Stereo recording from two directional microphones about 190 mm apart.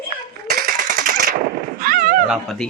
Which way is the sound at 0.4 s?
55° right (ahead or behind).